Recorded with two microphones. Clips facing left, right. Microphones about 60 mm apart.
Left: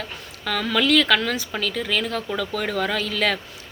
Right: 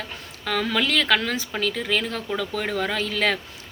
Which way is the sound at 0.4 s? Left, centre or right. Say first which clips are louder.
Left 2 dB; right.